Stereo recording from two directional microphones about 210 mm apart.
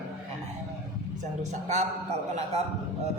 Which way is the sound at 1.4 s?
35° right (ahead or behind).